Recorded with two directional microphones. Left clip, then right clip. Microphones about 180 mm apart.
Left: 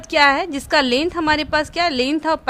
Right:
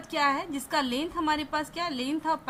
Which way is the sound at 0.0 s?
45° left (ahead or behind).